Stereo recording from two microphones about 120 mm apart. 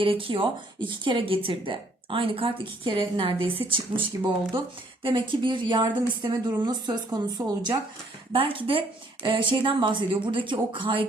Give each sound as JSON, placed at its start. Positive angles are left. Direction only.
{"t": 0.0, "sound": "speech", "side_deg": -50}
{"t": 5.0, "sound": "speech", "side_deg": -40}
{"t": 8.3, "sound": "speech", "side_deg": -50}